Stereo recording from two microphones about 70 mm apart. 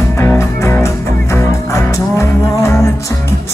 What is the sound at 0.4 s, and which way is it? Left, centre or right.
Music, left.